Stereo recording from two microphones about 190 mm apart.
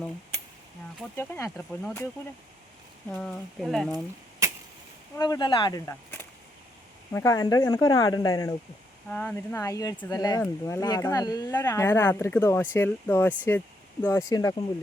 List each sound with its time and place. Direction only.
1.1 s speech: 10° left (ahead or behind)
3.1 s speech: 5° left (ahead or behind)
4.4 s arrow: 15° right (ahead or behind)
5.1 s speech: 20° left (ahead or behind)
9.0 s speech: 5° left (ahead or behind)